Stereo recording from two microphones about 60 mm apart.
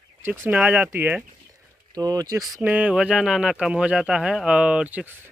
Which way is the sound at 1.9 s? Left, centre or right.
Right.